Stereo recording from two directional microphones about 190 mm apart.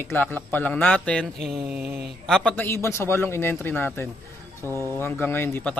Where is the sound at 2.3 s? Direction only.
5° left (ahead or behind).